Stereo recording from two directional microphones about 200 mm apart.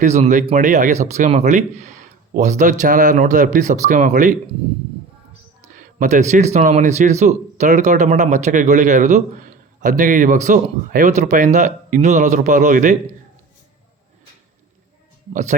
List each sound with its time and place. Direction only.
0.0 s speech: 35° right (ahead or behind)
5.6 s speech: 40° right (ahead or behind)
15.3 s speech: 35° right (ahead or behind)